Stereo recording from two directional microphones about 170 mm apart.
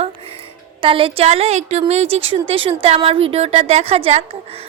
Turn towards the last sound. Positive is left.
turn(degrees=-35)  # may be behind; listen again after turning